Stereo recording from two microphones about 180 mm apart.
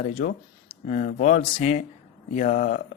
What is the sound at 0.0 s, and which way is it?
Speech, 45° left (ahead or behind).